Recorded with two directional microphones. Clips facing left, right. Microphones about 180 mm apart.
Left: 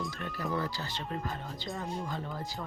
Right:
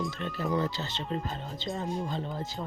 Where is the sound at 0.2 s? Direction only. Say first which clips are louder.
Right 4 dB; 25° right (ahead or behind).